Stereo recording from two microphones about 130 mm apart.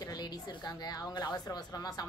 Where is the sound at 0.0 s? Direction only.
30° left (ahead or behind).